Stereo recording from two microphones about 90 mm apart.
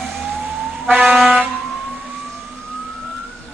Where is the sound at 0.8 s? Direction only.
15° right (ahead or behind).